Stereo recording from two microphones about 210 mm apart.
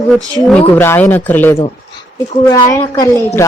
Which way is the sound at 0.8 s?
10° left (ahead or behind).